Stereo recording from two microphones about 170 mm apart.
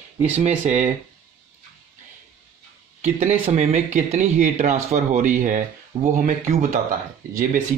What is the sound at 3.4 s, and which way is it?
Speech, 40° right (ahead or behind).